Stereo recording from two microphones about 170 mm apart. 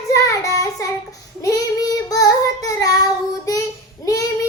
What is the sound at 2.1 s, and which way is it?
Child singing, 20° left (ahead or behind).